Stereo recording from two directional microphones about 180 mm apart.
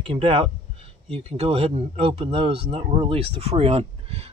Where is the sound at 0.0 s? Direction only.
30° right (ahead or behind).